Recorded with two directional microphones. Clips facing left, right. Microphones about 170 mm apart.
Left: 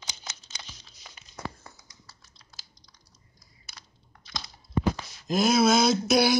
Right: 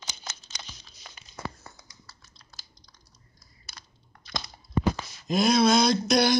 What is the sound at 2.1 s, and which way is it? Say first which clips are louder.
Typing: right 1 dB; 60° right (ahead or behind).